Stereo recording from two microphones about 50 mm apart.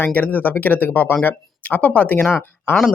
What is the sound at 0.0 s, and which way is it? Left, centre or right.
Speech, left.